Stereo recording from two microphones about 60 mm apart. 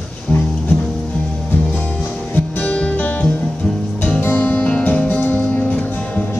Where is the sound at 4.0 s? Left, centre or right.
Left.